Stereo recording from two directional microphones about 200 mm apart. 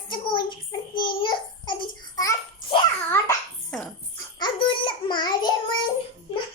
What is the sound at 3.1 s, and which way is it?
Babbling, 10° left (ahead or behind).